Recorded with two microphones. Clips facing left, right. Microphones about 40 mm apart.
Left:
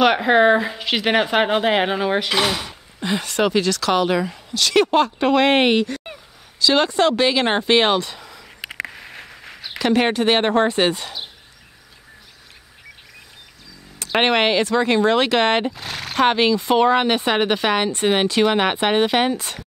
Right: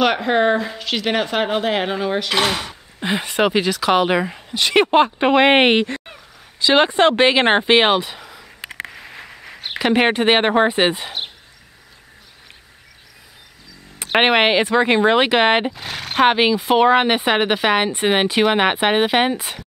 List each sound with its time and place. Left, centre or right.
0.0 s speech: centre
2.3 s speech: centre
9.8 s speech: right
14.1 s speech: centre
15.7 s speech: centre